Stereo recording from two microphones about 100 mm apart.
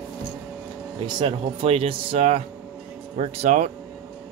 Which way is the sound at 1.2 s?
65° right (ahead or behind).